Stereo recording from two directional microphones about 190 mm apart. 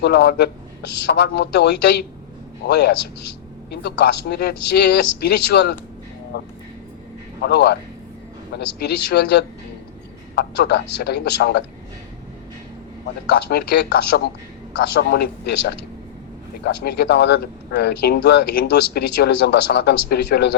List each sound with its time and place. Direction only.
0.0 s speech: 60° left (ahead or behind)
13.2 s speech: 55° left (ahead or behind)